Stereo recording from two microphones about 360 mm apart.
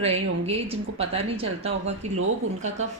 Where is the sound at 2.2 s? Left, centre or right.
Right.